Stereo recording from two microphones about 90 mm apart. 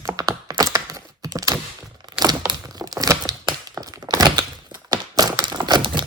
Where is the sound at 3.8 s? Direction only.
45° right (ahead or behind).